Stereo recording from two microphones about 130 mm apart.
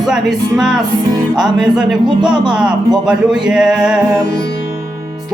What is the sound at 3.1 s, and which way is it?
Music, 5° right (ahead or behind).